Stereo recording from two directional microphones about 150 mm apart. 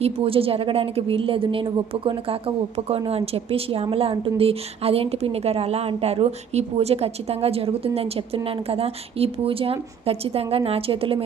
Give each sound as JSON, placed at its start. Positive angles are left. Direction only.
{"t": 0.0, "sound": "a woman's voice", "side_deg": -40}